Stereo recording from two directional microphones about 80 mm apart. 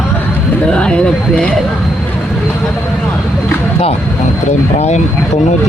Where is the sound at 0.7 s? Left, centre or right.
Centre.